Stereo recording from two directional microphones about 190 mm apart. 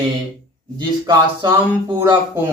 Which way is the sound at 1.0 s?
20° right (ahead or behind).